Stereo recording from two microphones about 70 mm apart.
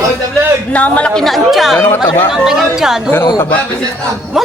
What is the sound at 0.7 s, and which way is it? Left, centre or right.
Speech, centre.